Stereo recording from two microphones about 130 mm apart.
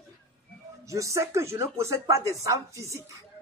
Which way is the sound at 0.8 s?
25° right (ahead or behind).